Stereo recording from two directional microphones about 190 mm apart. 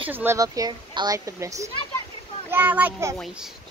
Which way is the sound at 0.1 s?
10° right (ahead or behind).